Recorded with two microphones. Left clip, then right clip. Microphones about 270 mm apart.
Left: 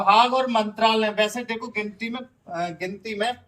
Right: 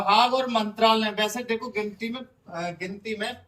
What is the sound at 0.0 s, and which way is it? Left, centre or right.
Speech, centre.